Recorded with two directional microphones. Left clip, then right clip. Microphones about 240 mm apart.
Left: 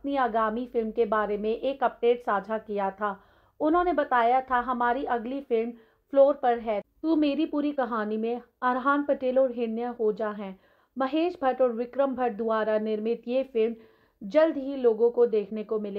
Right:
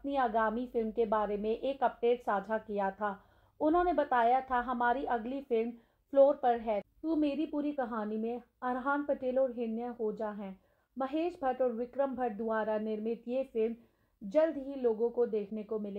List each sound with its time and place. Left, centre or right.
0.0 s a woman's voice: left